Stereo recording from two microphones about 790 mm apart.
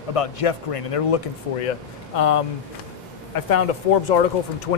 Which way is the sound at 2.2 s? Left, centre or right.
Left.